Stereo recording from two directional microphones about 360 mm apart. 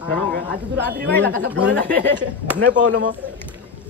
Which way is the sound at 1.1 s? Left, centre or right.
Centre.